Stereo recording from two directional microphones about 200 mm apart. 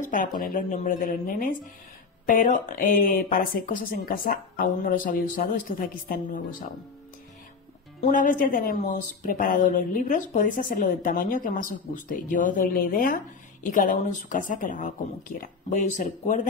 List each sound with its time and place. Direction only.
0.0 s speech: 40° left (ahead or behind)
8.0 s speech: 40° left (ahead or behind)